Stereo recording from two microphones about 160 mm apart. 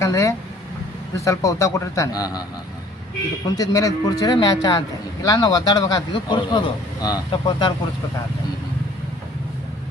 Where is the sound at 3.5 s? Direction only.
20° left (ahead or behind).